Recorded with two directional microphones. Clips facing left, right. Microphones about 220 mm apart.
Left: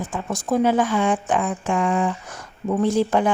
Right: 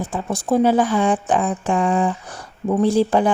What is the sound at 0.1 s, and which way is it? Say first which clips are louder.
Speech: right 3 dB; 35° right (ahead or behind).